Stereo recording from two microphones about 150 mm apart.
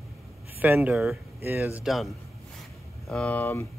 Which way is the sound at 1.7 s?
Centre (ahead or behind).